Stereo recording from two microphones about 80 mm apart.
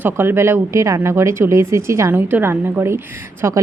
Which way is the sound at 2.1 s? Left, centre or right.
Right.